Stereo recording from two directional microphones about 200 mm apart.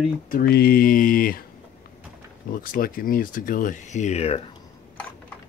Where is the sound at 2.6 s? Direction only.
45° left (ahead or behind).